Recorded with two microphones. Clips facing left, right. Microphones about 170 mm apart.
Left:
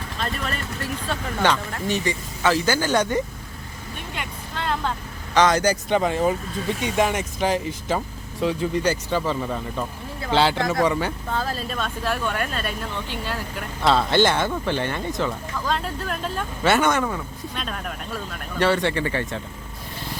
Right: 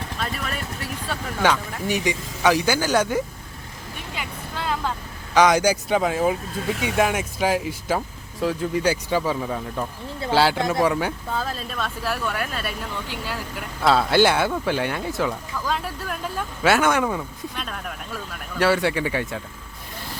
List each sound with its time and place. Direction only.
0.2 s vehicle: 5° right (ahead or behind)
1.0 s speech: 10° right (ahead or behind)
4.1 s vehicle: 5° right (ahead or behind)
5.3 s speech: 10° right (ahead or behind)